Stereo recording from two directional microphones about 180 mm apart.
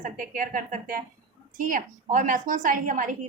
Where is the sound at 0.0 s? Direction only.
50° right (ahead or behind).